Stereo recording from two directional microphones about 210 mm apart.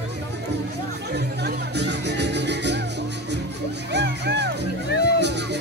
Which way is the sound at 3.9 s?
55° right (ahead or behind).